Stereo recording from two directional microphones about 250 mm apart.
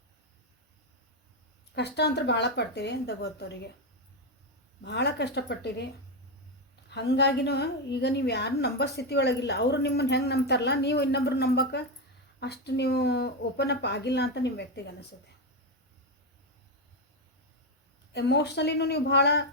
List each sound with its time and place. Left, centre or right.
1.7 s a woman's voice: left
4.8 s a woman's voice: left
6.9 s a woman's voice: left
18.1 s a woman's voice: left